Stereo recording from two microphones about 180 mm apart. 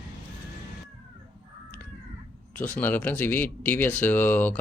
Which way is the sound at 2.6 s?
10° left (ahead or behind).